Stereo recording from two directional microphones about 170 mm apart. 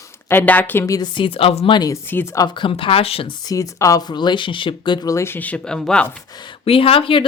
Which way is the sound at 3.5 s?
20° left (ahead or behind).